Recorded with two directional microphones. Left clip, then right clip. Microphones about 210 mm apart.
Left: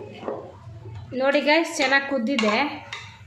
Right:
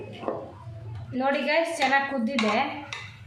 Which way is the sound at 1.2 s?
45° left (ahead or behind).